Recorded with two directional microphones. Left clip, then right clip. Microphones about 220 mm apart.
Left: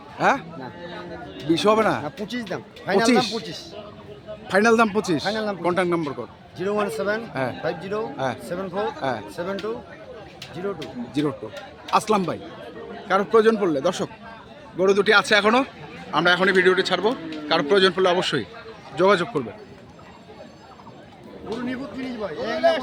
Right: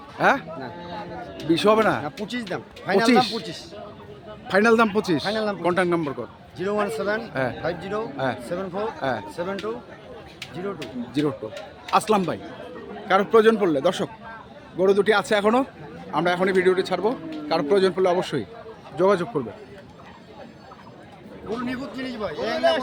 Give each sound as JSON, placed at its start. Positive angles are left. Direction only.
{"t": 0.2, "sound": "speech", "side_deg": 0}
{"t": 6.6, "sound": "speech", "side_deg": 10}
{"t": 10.8, "sound": "speech", "side_deg": 0}
{"t": 21.7, "sound": "a man's voice", "side_deg": -30}